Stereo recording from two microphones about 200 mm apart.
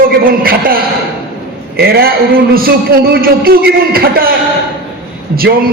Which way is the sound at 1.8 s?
50° right (ahead or behind).